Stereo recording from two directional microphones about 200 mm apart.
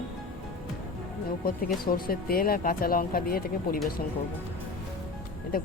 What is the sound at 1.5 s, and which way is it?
Speech, 45° left (ahead or behind).